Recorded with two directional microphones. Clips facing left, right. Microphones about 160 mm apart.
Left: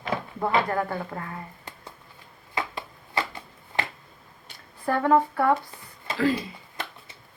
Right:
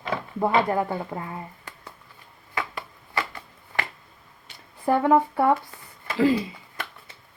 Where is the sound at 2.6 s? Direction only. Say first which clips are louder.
Even; 25° left (ahead or behind).